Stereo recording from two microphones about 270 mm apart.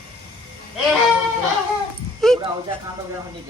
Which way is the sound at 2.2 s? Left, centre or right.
Centre.